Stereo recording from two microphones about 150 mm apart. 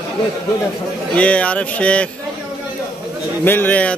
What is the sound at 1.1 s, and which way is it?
Speech, 10° left (ahead or behind).